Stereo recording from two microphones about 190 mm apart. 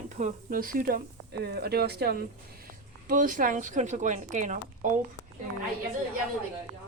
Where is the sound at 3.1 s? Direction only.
45° right (ahead or behind).